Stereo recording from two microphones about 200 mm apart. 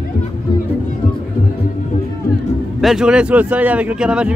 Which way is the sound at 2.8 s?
Centre (ahead or behind).